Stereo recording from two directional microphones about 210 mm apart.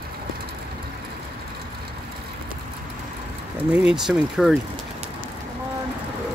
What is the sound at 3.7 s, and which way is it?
Speech, 5° right (ahead or behind).